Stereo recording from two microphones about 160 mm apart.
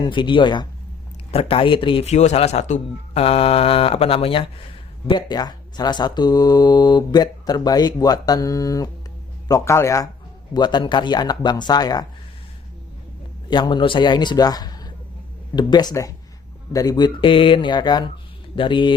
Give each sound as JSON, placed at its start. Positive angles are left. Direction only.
{"t": 0.0, "sound": "a man's voice", "side_deg": 30}
{"t": 13.5, "sound": "a man's voice", "side_deg": 30}